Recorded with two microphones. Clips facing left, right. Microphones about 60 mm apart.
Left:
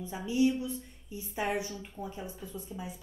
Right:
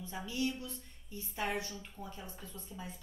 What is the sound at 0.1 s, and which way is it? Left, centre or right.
A woman's voice, centre.